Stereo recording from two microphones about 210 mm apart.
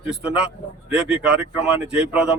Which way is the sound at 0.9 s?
5° right (ahead or behind).